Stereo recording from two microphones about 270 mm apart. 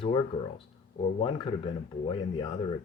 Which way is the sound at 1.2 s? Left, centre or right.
Centre.